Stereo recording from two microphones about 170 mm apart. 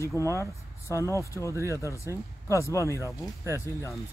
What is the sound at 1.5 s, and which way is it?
Speech, 15° right (ahead or behind).